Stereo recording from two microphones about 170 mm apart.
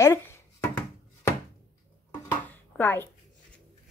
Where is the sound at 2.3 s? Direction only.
10° left (ahead or behind).